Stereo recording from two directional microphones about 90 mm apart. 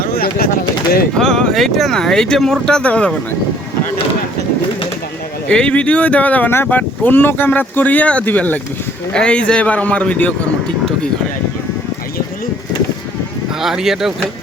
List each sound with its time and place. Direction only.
1.2 s speech: 5° left (ahead or behind)
5.5 s a man's voice: 10° left (ahead or behind)
13.6 s speech: 5° right (ahead or behind)